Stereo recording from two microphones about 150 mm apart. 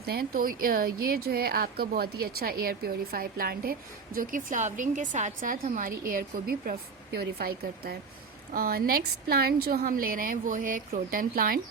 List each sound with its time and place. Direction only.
0.0 s a woman's voice: 90° right; by 11.6 s 75° right (ahead or behind)